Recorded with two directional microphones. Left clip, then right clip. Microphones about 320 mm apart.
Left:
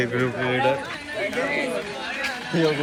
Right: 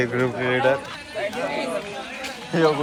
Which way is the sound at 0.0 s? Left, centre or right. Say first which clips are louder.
Right 1 dB; centre.